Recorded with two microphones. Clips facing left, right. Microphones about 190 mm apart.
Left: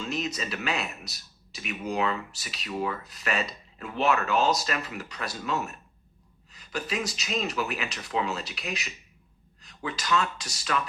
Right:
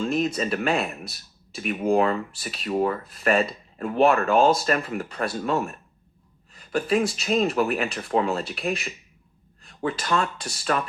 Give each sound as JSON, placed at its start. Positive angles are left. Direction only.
{"t": 0.0, "sound": "speech", "side_deg": -50}
{"t": 6.5, "sound": "a sound", "side_deg": -50}
{"t": 7.1, "sound": "speech", "side_deg": -50}